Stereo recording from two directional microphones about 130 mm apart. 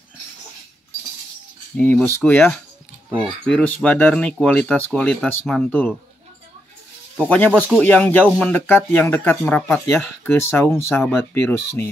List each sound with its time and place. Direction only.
1.8 s speech: 15° left (ahead or behind)
7.2 s speech: 10° left (ahead or behind)